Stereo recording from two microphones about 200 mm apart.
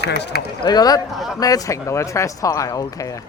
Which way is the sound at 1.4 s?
15° left (ahead or behind).